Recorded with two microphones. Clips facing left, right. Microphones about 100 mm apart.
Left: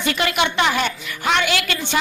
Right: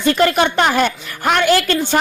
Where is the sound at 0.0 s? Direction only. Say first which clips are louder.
Right 6 dB; 40° right (ahead or behind).